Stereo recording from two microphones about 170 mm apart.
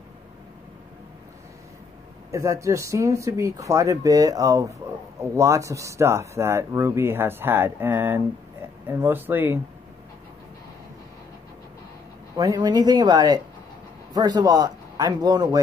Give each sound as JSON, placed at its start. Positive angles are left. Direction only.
{"t": 2.3, "sound": "speech", "side_deg": -15}
{"t": 12.4, "sound": "speech", "side_deg": -20}